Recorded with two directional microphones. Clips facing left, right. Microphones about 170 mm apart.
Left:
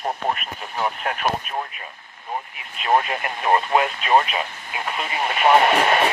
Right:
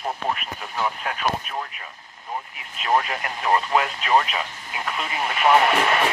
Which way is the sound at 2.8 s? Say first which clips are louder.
Left 2 dB; 20° left (ahead or behind).